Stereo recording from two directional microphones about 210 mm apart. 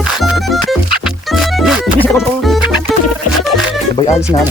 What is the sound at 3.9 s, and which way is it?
Speech, 25° left (ahead or behind).